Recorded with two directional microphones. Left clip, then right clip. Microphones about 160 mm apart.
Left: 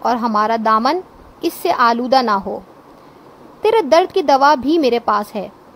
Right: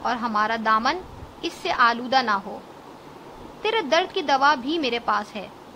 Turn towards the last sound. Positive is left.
turn(degrees=65)  # may be behind; listen again after turning